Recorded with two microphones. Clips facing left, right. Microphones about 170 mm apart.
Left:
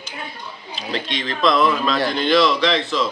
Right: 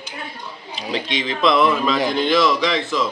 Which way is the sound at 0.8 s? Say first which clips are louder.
Right 2 dB; 15° right (ahead or behind).